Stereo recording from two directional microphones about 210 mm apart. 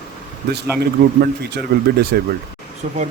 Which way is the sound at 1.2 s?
50° right (ahead or behind).